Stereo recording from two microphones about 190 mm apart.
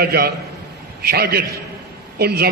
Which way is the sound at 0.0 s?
55° right (ahead or behind).